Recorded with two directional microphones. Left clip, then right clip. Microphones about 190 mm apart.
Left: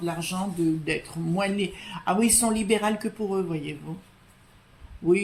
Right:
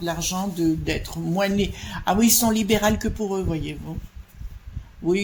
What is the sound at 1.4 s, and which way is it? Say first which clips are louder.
Speech: right 4 dB; 40° right (ahead or behind).